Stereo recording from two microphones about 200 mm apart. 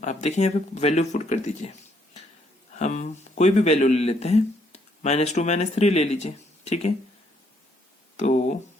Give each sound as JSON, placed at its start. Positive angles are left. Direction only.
{"t": 0.0, "sound": "speech", "side_deg": 35}
{"t": 2.7, "sound": "speech", "side_deg": 35}
{"t": 8.1, "sound": "a sound", "side_deg": 35}